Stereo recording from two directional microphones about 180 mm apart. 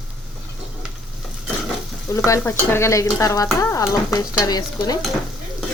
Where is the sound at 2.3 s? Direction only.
15° left (ahead or behind).